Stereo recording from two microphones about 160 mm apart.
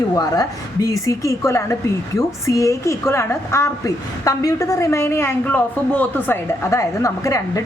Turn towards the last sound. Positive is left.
turn(degrees=20)  # may be behind; listen again after turning